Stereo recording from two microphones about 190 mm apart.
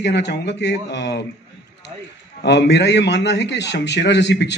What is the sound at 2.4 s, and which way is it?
A man's voice, 65° left (ahead or behind).